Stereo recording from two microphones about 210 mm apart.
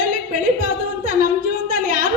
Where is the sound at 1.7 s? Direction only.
40° right (ahead or behind).